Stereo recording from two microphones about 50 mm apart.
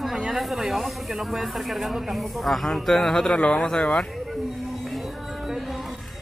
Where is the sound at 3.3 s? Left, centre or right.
Left.